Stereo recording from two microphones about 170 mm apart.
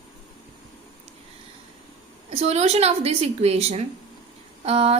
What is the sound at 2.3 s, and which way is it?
A woman's voice, 40° right (ahead or behind).